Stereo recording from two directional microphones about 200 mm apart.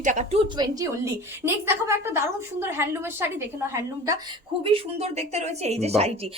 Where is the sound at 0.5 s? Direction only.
20° right (ahead or behind).